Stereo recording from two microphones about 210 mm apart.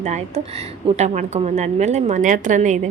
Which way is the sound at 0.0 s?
30° right (ahead or behind).